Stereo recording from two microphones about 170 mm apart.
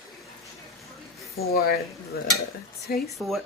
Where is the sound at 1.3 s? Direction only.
65° left (ahead or behind).